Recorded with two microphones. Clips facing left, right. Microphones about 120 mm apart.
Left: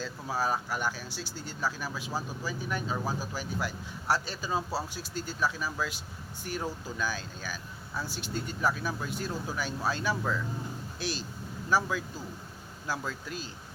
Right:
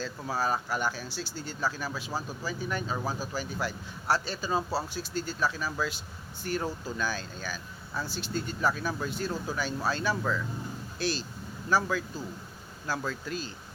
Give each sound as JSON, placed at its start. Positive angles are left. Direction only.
{"t": 0.0, "sound": "speech", "side_deg": 5}
{"t": 11.7, "sound": "speech", "side_deg": 10}